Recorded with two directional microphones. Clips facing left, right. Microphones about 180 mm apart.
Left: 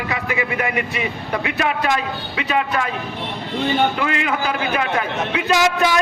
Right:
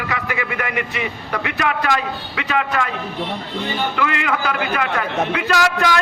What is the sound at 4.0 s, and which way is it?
Speech, 25° left (ahead or behind).